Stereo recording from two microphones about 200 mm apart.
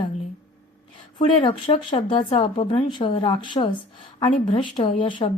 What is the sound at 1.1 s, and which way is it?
Speech, 25° left (ahead or behind).